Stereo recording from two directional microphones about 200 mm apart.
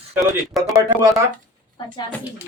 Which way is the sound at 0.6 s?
Centre (ahead or behind).